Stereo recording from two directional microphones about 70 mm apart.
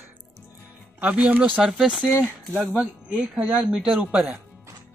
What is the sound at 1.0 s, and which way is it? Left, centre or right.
Speech, right.